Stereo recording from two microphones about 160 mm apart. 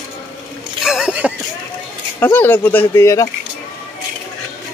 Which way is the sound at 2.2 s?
15° left (ahead or behind).